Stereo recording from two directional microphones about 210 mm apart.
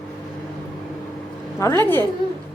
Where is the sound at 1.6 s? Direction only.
10° left (ahead or behind).